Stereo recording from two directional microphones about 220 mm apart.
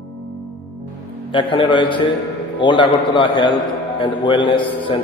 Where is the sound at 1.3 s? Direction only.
20° left (ahead or behind).